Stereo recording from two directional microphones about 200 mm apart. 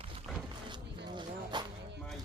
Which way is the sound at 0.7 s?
20° right (ahead or behind).